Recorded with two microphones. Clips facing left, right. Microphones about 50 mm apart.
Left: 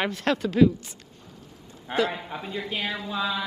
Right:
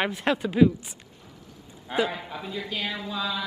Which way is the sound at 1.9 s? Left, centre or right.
Left.